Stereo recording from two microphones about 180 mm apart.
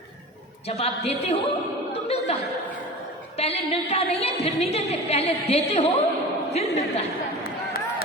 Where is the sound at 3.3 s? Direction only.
35° left (ahead or behind).